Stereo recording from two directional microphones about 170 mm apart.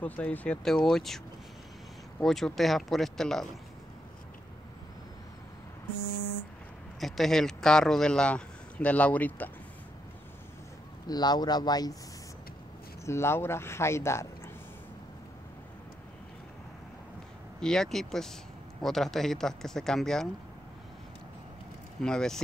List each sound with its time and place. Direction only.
0.0 s a man's voice: 10° left (ahead or behind)
7.0 s a man's voice: centre (ahead or behind)
11.1 s speech: 25° left (ahead or behind)
13.0 s speech: 15° left (ahead or behind)
17.6 s a man's voice: 5° left (ahead or behind)
22.0 s a man's voice: 5° left (ahead or behind)